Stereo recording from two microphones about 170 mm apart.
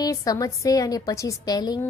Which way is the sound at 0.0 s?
20° left (ahead or behind).